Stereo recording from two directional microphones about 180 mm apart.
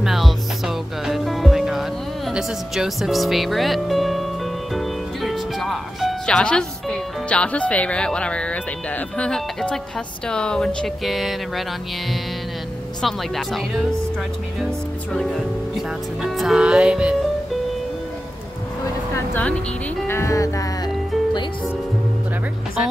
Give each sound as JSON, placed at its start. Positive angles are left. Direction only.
{"t": 0.0, "sound": "music", "side_deg": 0}
{"t": 10.2, "sound": "speech", "side_deg": 5}
{"t": 13.0, "sound": "speech", "side_deg": 0}
{"t": 15.1, "sound": "speech", "side_deg": 0}
{"t": 19.1, "sound": "music", "side_deg": 10}